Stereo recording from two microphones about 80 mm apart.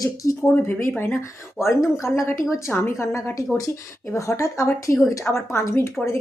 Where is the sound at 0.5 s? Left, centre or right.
Left.